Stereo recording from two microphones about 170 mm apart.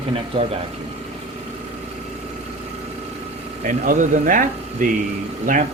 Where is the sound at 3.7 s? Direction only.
50° right (ahead or behind).